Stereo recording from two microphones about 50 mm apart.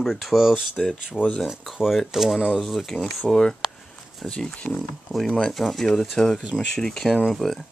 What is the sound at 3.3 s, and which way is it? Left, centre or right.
Speech, centre.